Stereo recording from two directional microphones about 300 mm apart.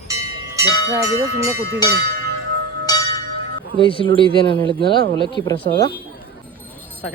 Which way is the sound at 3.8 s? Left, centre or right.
Centre.